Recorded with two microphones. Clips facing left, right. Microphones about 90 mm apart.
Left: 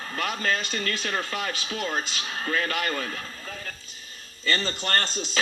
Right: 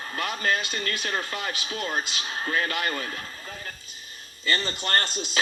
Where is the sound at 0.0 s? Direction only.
25° right (ahead or behind).